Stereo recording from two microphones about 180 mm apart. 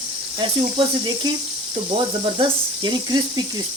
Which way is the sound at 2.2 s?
25° right (ahead or behind).